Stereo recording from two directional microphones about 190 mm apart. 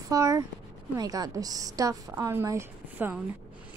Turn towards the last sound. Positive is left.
turn(degrees=-10)  # may be behind; listen again after turning